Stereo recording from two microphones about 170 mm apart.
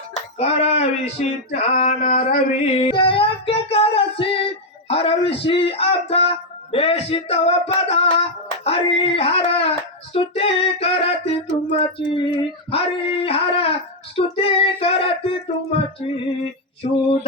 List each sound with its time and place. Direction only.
0.3 s speech: 35° left (ahead or behind)
2.0 s a sound: 50° left (ahead or behind)
2.8 s music: 30° left (ahead or behind)
4.9 s speech: 35° left (ahead or behind)